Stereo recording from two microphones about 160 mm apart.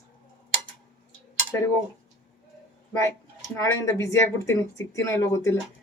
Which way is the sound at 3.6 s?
20° left (ahead or behind).